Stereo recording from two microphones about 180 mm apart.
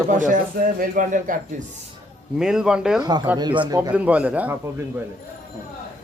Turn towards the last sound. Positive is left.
turn(degrees=-10)  # may be behind; listen again after turning